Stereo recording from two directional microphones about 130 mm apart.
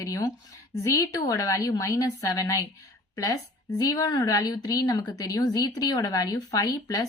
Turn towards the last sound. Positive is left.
turn(degrees=30)  # may be behind; listen again after turning